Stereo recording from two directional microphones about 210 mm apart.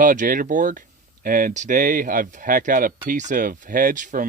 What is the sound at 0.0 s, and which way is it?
Speech, 40° right (ahead or behind).